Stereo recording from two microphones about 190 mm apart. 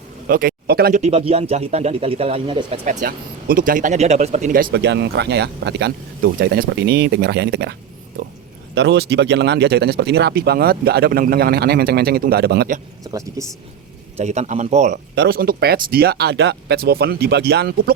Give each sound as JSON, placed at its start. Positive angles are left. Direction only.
{"t": 0.3, "sound": "speech", "side_deg": -50}
{"t": 1.0, "sound": "speech", "side_deg": -35}
{"t": 2.8, "sound": "speech", "side_deg": -45}
{"t": 13.4, "sound": "speech", "side_deg": -15}
{"t": 14.2, "sound": "speech", "side_deg": -35}
{"t": 15.1, "sound": "speech", "side_deg": -60}